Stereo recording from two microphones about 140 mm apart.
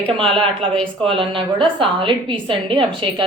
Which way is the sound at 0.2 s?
40° right (ahead or behind).